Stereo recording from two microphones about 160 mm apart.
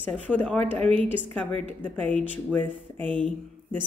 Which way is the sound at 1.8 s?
10° left (ahead or behind).